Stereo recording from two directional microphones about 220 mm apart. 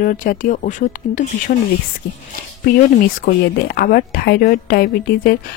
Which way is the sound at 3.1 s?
45° left (ahead or behind).